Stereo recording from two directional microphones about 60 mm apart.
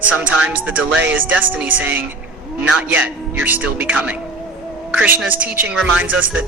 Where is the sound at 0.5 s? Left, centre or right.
Right.